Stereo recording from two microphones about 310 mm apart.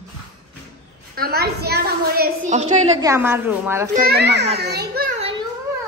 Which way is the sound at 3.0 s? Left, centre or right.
Centre.